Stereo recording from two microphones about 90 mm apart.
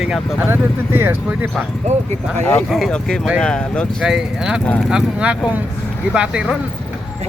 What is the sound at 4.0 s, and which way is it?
Speech, 5° right (ahead or behind).